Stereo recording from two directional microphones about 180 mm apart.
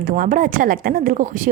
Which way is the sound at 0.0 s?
50° right (ahead or behind).